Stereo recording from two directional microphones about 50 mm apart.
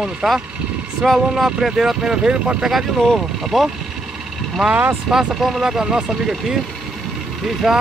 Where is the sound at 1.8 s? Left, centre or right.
Centre.